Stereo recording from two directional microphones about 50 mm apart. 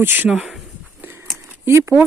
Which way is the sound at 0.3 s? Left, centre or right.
Centre.